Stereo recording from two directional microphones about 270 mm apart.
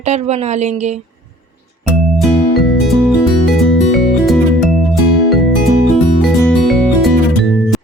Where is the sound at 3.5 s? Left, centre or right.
Centre.